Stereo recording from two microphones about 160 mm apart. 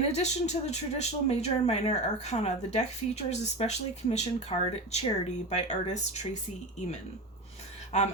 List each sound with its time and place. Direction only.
0.1 s speech: 45° left (ahead or behind)
7.9 s speech: 45° left (ahead or behind)